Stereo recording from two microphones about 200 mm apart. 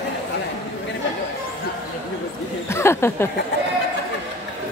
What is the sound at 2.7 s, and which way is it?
Speech, 15° left (ahead or behind).